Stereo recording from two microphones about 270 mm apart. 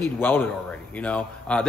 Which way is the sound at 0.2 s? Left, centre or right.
Centre.